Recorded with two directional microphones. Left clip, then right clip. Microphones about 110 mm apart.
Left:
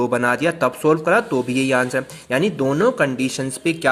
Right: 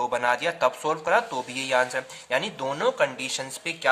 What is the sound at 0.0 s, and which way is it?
Speech, 40° left (ahead or behind).